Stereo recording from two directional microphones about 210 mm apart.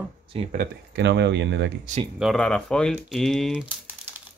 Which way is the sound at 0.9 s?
55° right (ahead or behind).